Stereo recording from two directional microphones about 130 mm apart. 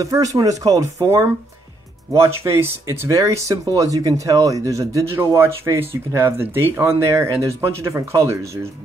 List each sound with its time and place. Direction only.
0.0 s speech: 25° right (ahead or behind)